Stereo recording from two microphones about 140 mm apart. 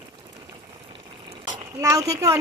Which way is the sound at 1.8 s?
20° right (ahead or behind).